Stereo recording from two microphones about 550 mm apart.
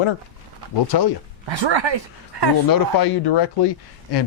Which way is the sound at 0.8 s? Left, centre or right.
Left.